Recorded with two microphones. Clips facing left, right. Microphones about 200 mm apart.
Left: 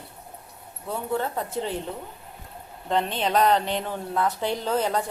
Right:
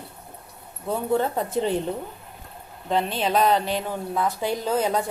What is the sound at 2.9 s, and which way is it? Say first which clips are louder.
Speech: right 1 dB; 5° right (ahead or behind).